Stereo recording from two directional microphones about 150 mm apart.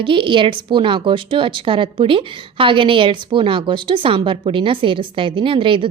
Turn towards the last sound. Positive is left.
turn(degrees=-35)  # may be behind; listen again after turning